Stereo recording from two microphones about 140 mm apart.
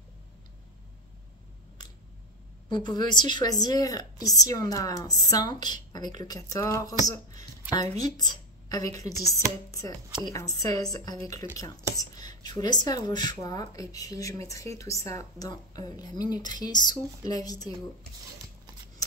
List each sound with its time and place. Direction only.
2.7 s a woman's voice: 30° left (ahead or behind)
7.7 s speech: 60° right (ahead or behind)
8.0 s a woman's voice: 30° left (ahead or behind)